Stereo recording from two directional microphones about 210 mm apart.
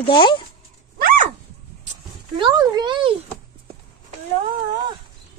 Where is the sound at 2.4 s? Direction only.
20° right (ahead or behind).